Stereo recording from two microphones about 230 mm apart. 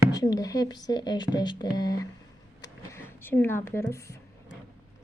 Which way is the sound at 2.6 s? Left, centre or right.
Centre.